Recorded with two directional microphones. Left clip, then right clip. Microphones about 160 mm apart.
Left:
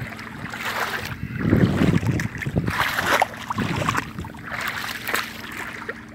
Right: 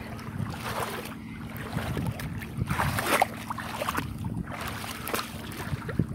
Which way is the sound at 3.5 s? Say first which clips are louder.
Left 8 dB; 20° left (ahead or behind).